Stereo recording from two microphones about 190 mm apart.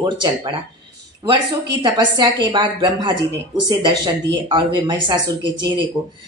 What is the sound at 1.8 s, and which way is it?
Speech, 25° right (ahead or behind).